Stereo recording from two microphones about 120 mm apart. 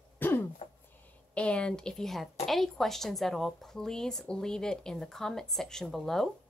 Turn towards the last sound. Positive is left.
turn(degrees=5)  # may be behind; listen again after turning